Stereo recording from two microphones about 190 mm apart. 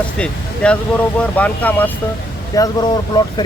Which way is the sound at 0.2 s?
5° left (ahead or behind).